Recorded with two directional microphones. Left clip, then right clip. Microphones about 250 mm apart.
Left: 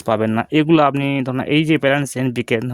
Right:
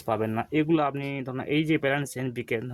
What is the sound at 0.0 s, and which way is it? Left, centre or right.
Speech, left.